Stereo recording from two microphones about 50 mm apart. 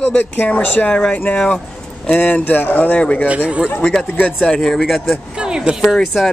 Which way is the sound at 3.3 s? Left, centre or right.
Right.